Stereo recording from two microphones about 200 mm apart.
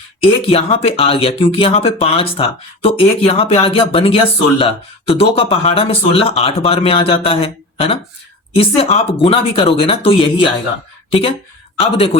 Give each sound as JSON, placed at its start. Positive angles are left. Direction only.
{"t": 0.2, "sound": "speech", "side_deg": 30}